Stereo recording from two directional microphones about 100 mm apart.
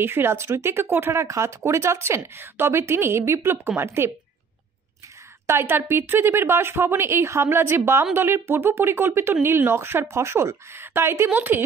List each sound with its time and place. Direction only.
0.0 s a woman's voice: 20° right (ahead or behind)
5.5 s a woman's voice: 25° right (ahead or behind)